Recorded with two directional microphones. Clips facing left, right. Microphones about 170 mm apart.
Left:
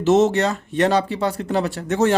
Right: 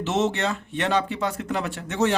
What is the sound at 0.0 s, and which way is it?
A man's voice, 40° left (ahead or behind).